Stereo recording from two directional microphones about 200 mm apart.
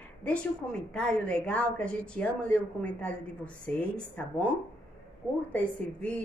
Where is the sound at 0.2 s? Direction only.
5° left (ahead or behind).